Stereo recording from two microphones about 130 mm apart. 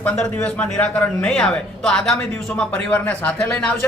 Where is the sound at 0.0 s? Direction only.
10° left (ahead or behind).